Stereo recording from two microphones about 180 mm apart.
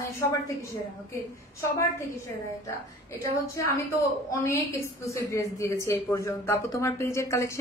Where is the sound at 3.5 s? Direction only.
15° left (ahead or behind).